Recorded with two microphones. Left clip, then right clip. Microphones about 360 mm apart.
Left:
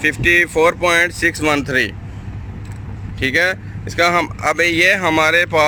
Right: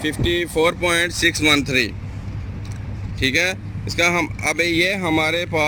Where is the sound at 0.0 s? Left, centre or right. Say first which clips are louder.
Left 8 dB; left.